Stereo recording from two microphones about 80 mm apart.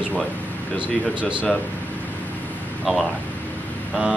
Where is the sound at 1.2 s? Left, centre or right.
Centre.